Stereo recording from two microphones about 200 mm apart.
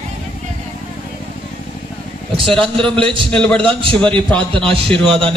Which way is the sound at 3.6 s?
25° right (ahead or behind).